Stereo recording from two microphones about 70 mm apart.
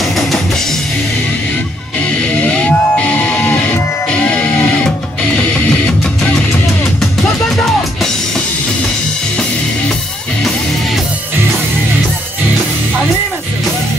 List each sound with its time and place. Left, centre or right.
2.0 s music: centre
4.8 s music: centre
7.0 s music: centre